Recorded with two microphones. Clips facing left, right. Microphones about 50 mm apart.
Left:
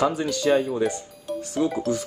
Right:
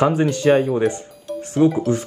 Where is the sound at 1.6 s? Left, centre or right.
Right.